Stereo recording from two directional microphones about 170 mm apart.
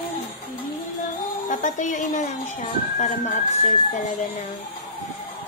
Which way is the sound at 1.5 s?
50° left (ahead or behind).